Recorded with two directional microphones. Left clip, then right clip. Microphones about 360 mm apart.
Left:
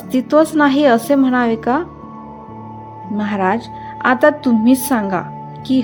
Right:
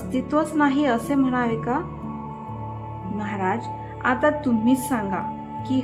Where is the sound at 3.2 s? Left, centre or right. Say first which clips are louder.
Left 8 dB; left.